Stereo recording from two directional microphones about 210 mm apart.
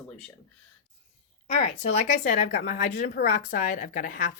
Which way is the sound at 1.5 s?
35° left (ahead or behind).